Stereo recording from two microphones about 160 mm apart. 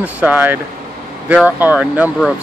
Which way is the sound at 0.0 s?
10° right (ahead or behind).